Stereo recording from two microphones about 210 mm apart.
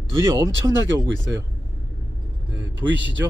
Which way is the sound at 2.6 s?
60° right (ahead or behind).